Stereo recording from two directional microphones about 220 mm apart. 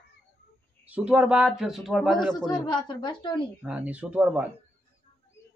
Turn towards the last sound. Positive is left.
turn(degrees=-5)  # may be behind; listen again after turning